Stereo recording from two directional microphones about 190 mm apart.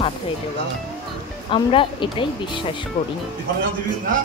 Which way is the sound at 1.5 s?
25° left (ahead or behind).